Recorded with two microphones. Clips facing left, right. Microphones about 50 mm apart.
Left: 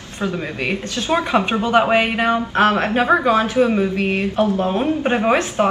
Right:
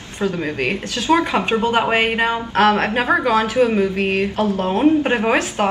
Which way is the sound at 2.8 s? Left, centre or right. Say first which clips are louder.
Left 2 dB; right.